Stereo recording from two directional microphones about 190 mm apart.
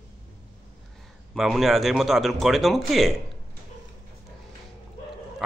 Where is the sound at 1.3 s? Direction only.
Centre (ahead or behind).